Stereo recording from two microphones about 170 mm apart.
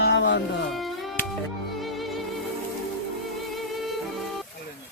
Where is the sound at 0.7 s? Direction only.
Centre (ahead or behind).